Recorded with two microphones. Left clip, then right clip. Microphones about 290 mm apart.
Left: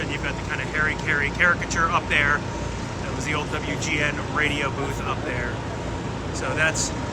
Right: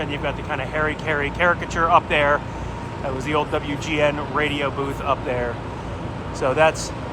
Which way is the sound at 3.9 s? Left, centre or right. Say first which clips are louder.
Right 5 dB; centre.